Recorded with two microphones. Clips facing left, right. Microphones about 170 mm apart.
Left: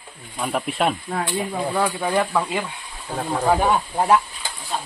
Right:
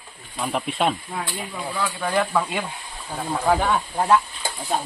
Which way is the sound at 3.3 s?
20° left (ahead or behind).